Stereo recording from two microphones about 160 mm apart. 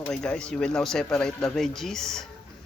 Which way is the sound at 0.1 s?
5° left (ahead or behind).